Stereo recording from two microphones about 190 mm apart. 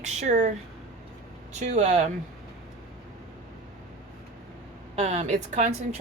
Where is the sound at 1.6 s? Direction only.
35° right (ahead or behind).